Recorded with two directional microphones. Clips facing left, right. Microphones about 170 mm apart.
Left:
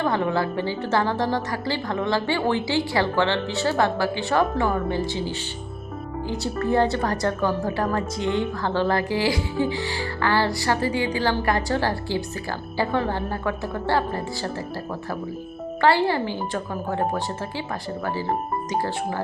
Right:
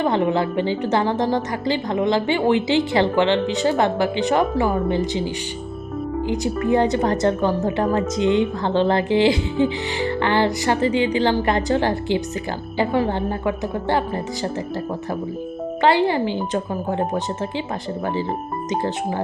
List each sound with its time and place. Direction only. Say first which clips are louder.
0.0 s a woman's voice: right 4 dB; 20° right (ahead or behind)
15.8 s a woman's voice: right 2 dB; 20° right (ahead or behind)
18.7 s a woman's voice: right 4 dB; 20° right (ahead or behind)